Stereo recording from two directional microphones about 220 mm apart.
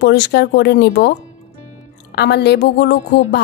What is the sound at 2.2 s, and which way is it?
A woman's voice, 50° left (ahead or behind).